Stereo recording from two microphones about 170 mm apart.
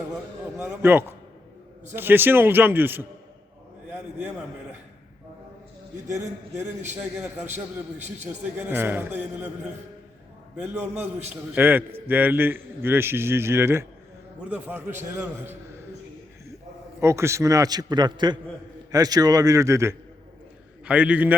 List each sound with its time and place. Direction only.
0.6 s a man's voice: 10° right (ahead or behind)
7.0 s a man's voice: 10° right (ahead or behind)
7.5 s a man's voice: 40° right (ahead or behind)
8.2 s a man's voice: 10° right (ahead or behind)
10.6 s a man's voice: 10° right (ahead or behind)
17.0 s a man's voice: 15° right (ahead or behind)